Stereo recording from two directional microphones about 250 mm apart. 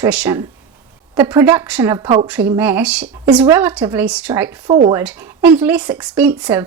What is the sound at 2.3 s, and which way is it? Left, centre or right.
Speech, centre.